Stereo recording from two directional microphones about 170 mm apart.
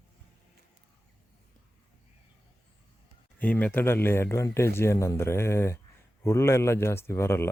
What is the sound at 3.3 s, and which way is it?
A man's voice, 10° left (ahead or behind).